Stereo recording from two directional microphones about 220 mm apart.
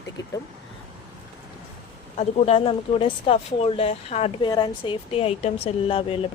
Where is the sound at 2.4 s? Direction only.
25° left (ahead or behind).